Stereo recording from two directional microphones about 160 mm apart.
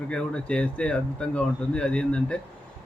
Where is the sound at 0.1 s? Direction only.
5° left (ahead or behind).